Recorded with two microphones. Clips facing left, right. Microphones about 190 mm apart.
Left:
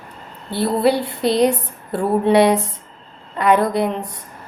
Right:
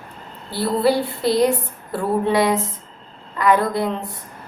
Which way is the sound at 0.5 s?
20° left (ahead or behind).